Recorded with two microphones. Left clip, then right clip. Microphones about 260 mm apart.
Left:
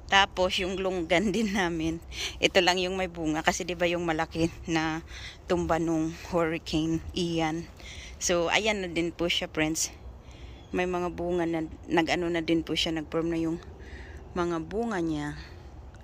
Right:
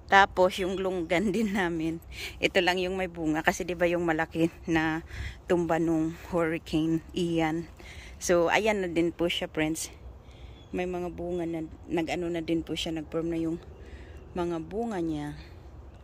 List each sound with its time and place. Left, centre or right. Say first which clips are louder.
0.1 s a man's voice: right 2 dB; right; by 15.4 s centre